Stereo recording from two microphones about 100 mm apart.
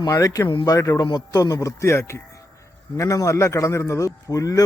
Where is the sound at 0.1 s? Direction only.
35° left (ahead or behind).